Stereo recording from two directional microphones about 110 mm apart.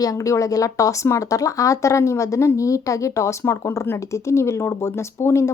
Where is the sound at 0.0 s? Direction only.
30° left (ahead or behind).